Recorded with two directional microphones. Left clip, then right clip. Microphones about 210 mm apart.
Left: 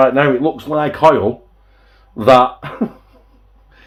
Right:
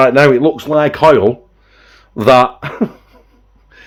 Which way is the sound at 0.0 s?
60° right (ahead or behind).